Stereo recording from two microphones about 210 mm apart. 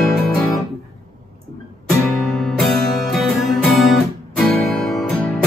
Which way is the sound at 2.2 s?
Centre (ahead or behind).